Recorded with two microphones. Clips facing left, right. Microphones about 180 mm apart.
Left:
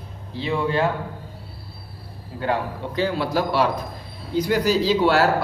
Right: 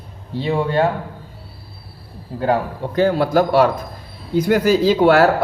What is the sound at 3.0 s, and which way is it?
Speech, 50° right (ahead or behind).